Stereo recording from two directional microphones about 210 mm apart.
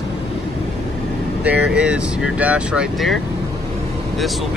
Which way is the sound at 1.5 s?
5° right (ahead or behind).